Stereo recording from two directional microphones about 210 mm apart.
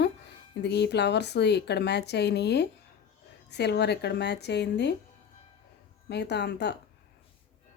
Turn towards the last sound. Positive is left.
turn(degrees=55)  # may be behind; listen again after turning